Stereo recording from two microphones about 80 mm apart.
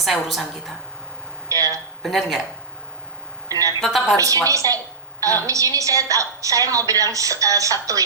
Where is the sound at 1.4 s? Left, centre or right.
Right.